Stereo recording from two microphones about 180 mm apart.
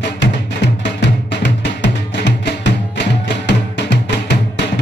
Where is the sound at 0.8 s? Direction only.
80° left.